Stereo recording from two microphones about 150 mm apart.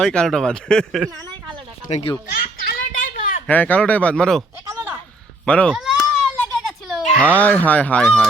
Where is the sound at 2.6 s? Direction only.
65° left (ahead or behind).